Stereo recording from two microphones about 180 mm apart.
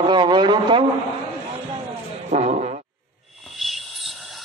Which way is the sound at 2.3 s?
40° right (ahead or behind).